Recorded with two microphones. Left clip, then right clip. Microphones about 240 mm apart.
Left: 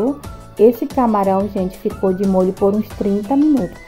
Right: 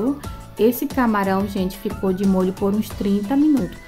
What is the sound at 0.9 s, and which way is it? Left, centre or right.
Speech, centre.